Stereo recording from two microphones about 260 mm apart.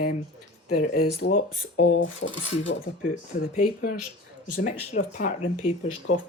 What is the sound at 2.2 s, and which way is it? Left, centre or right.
Speech, left.